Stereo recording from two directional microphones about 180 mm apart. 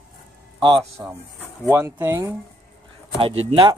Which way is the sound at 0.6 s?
25° right (ahead or behind).